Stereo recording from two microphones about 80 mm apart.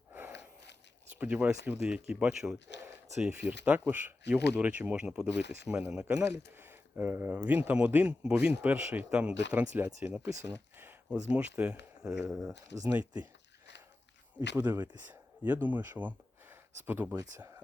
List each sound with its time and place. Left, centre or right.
0.1 s a sound: right
1.1 s speech: centre
1.7 s speech: centre
6.6 s speech: right
12.7 s speech: right
14.3 s speech: right